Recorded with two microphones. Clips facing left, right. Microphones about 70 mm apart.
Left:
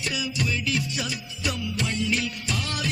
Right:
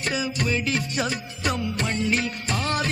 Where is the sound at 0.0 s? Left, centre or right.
Right.